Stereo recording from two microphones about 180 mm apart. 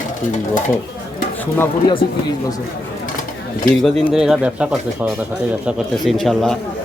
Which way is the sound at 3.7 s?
Centre (ahead or behind).